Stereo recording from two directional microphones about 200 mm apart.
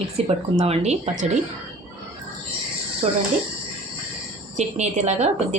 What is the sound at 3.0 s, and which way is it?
Speech, 30° right (ahead or behind).